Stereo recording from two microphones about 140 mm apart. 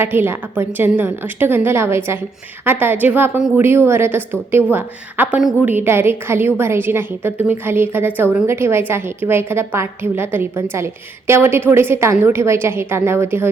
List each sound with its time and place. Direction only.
0.0 s a woman's voice: 15° right (ahead or behind)